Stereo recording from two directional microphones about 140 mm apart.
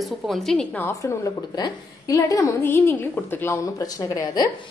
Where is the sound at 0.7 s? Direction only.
15° left (ahead or behind).